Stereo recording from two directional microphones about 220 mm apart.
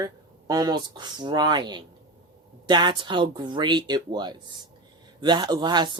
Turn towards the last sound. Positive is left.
turn(degrees=-20)  # may be behind; listen again after turning